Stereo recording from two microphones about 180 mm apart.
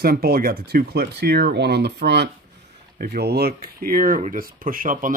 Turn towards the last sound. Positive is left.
turn(degrees=-50)  # may be behind; listen again after turning